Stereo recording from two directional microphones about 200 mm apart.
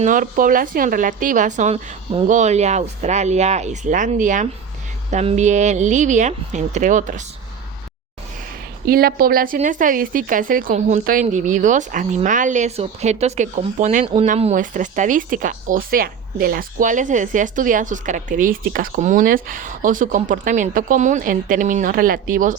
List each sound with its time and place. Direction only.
0.0 s speech: 40° right (ahead or behind)
8.9 s speech: 50° right (ahead or behind)